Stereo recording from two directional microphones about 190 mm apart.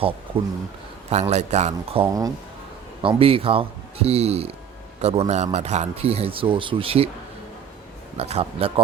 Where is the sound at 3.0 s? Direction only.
30° right (ahead or behind).